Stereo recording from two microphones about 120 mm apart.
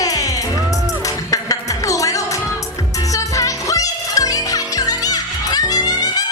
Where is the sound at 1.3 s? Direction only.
30° left (ahead or behind).